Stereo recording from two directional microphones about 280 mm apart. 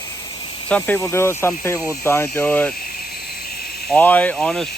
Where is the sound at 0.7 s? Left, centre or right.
Centre.